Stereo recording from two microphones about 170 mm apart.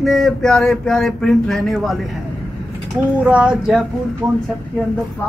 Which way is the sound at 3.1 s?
5° right (ahead or behind).